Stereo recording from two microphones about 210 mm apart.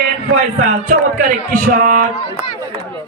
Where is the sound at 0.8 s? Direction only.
40° right (ahead or behind).